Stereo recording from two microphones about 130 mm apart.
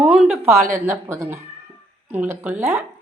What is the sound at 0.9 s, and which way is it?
A woman's voice, 20° right (ahead or behind).